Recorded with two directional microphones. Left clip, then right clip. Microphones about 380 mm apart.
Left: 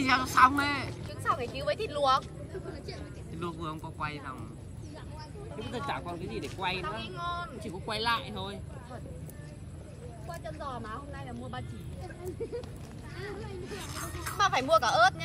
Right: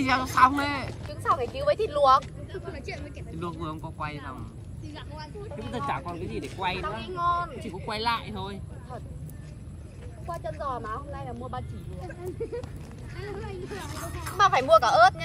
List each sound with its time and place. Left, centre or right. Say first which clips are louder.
0.0 s speech: right 2 dB; centre
1.2 s speech: right 6 dB; centre
3.3 s speech: right 2 dB; centre
5.6 s speech: right 4 dB; centre
10.4 s speech: right 7 dB; centre
13.9 s speech: right 2 dB; centre
14.3 s speech: right 6 dB; centre